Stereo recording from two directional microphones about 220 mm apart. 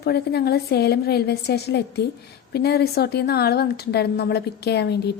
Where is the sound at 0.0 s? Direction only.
45° left (ahead or behind).